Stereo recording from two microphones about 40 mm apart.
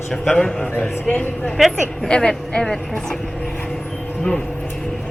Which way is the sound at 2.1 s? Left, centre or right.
Left.